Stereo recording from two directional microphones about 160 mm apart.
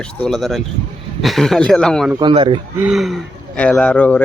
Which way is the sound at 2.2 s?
30° right (ahead or behind).